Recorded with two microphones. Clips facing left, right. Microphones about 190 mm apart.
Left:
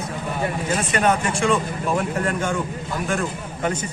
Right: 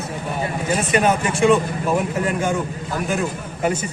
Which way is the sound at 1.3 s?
5° right (ahead or behind).